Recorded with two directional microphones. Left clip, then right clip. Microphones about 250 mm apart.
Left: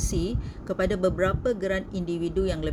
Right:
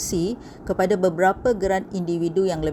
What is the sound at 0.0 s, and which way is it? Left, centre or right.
A woman's voice, centre.